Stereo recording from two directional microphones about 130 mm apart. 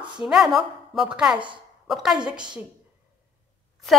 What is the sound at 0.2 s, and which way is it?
A woman's voice, centre (ahead or behind).